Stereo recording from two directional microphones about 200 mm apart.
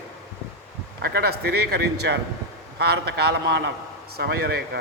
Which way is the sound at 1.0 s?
50° right (ahead or behind).